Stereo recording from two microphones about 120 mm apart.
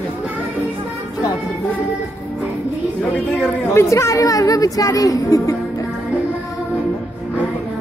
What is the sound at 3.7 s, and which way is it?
A woman's voice, 25° left (ahead or behind).